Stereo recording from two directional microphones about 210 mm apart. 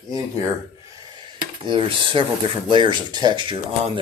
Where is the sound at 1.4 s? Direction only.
25° right (ahead or behind).